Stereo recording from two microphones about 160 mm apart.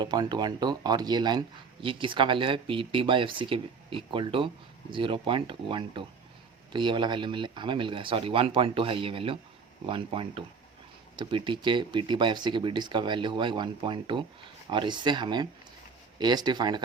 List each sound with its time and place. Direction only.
0.0 s speech: 25° right (ahead or behind)